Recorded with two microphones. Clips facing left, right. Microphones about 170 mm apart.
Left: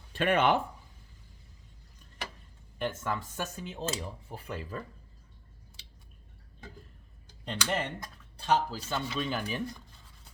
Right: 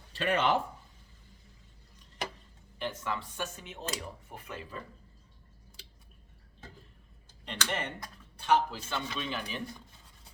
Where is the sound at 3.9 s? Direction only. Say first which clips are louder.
Left 3 dB; 30° left (ahead or behind).